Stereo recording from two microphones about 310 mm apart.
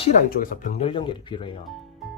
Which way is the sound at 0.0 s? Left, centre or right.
Left.